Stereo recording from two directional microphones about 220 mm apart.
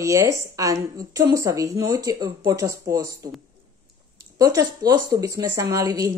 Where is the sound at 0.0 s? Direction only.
15° right (ahead or behind).